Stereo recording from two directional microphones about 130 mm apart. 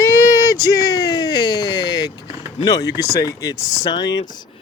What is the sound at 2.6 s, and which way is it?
Speech, 30° left (ahead or behind).